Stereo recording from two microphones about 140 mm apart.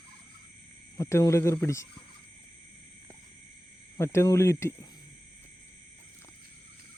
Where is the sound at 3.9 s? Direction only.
20° left (ahead or behind).